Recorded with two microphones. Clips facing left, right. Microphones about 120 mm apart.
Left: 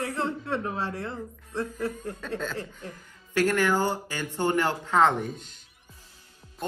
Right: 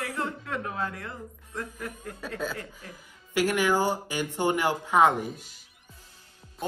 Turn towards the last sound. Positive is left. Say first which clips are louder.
# left 1 dB
turn(degrees=-5)  # may be behind; listen again after turning